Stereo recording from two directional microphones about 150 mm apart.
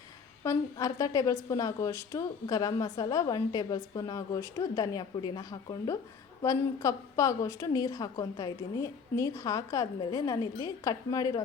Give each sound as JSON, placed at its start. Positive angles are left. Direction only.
{"t": 0.4, "sound": "a woman's voice", "side_deg": 25}